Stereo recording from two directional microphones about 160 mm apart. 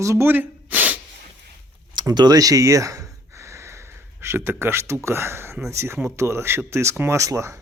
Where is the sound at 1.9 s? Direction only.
25° right (ahead or behind).